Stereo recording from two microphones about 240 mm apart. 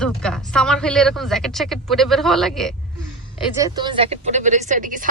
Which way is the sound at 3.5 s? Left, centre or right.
Centre.